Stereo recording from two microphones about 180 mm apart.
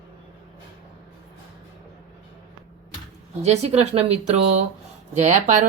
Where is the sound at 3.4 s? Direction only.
40° right (ahead or behind).